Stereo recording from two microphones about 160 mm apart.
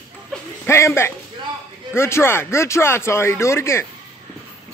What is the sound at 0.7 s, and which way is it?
Speech, 15° left (ahead or behind).